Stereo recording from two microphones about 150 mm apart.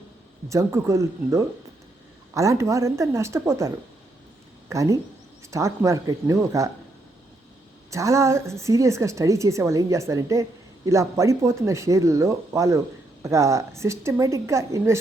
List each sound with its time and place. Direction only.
0.4 s a woman's voice: 20° right (ahead or behind)
4.7 s a woman's voice: 20° right (ahead or behind)
7.9 s a woman's voice: 20° right (ahead or behind)